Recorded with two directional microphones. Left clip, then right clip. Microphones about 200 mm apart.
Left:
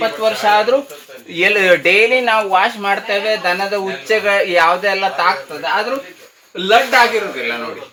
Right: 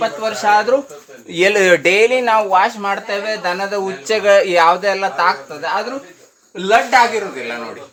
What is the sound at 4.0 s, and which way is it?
Speech, 30° right (ahead or behind).